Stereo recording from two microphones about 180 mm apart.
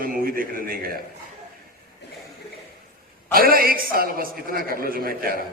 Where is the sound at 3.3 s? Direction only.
55° right (ahead or behind).